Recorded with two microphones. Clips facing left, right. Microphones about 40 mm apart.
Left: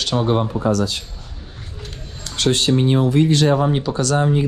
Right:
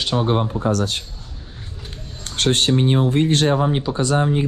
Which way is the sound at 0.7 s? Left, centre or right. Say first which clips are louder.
Left 2 dB; right.